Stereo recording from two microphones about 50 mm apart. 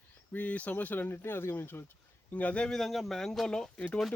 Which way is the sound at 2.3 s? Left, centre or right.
Left.